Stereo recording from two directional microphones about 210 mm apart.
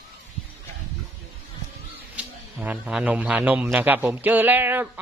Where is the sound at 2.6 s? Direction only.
5° right (ahead or behind).